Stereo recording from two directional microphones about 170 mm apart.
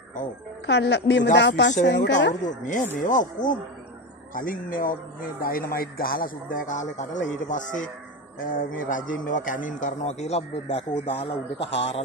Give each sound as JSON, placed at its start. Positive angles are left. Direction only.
{"t": 0.7, "sound": "a woman's voice", "side_deg": 85}
{"t": 2.6, "sound": "a man's voice", "side_deg": 50}